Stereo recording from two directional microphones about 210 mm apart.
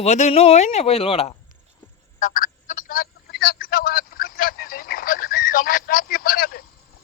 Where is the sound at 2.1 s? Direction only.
40° left (ahead or behind).